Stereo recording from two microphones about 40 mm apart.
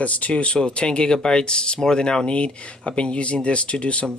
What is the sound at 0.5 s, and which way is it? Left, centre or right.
Speech, left.